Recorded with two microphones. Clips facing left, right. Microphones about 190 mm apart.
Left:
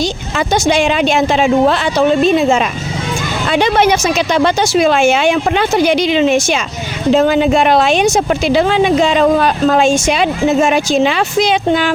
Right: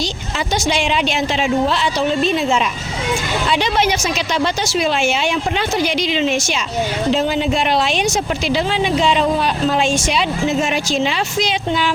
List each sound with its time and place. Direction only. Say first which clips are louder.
0.3 s speech: left 6 dB; 50° left (ahead or behind)